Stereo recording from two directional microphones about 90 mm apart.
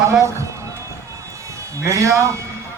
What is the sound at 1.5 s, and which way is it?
Speech, 35° right (ahead or behind).